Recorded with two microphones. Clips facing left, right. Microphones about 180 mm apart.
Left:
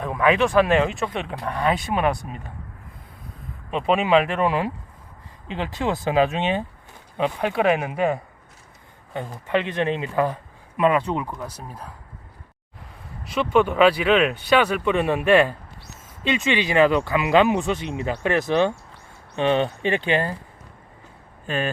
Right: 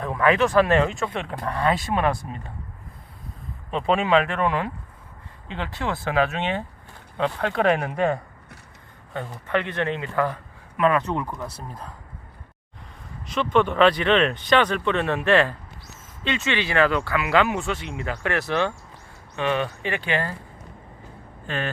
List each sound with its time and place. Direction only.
0.0 s speech: 15° left (ahead or behind)
3.7 s speech: 15° left (ahead or behind)
9.1 s speech: 20° left (ahead or behind)
13.2 s speech: 5° left (ahead or behind); by 20.3 s 20° left (ahead or behind)
21.4 s speech: 15° left (ahead or behind)